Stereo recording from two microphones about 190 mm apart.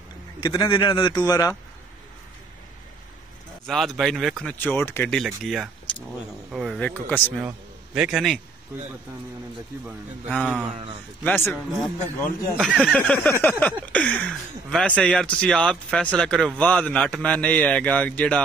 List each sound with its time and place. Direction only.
0.4 s a man's voice: 20° left (ahead or behind)
3.6 s speech: centre (ahead or behind)
5.2 s speech: centre (ahead or behind)
7.3 s a man's voice: 5° right (ahead or behind)
10.4 s speech: 5° right (ahead or behind)